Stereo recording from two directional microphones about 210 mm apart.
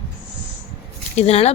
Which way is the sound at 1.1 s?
30° left (ahead or behind).